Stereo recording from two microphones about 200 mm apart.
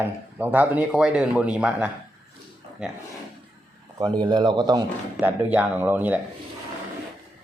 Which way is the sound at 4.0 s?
20° right (ahead or behind).